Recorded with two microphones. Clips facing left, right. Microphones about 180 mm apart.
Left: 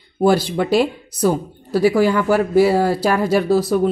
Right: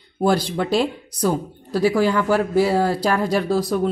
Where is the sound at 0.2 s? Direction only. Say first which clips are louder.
Left 4 dB; 5° left (ahead or behind).